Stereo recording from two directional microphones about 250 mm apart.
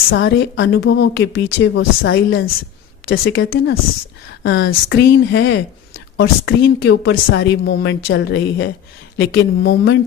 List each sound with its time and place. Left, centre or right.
0.1 s a woman's voice: left